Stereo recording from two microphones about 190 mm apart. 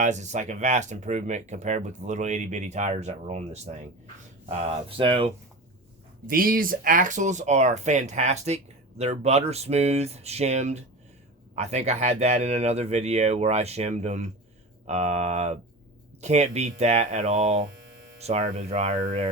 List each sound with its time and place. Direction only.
0.0 s speech: 40° right (ahead or behind)
6.2 s speech: 50° right (ahead or behind)